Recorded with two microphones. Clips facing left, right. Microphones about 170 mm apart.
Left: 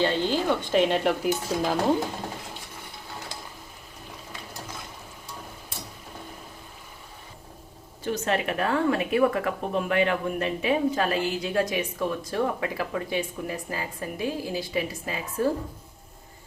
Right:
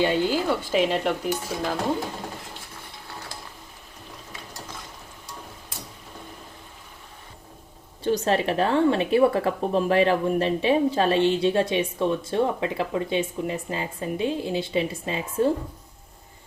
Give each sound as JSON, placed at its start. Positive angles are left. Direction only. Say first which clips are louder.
{"t": 0.0, "sound": "speech", "louder": "right 2 dB", "side_deg": -10}
{"t": 8.0, "sound": "a woman's voice", "louder": "right 4 dB", "side_deg": -30}